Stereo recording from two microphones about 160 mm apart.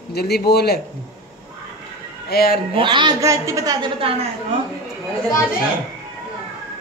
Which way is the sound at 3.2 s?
20° right (ahead or behind).